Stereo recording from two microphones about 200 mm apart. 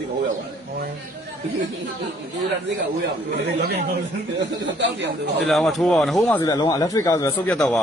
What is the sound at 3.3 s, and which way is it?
Speech, 60° right (ahead or behind).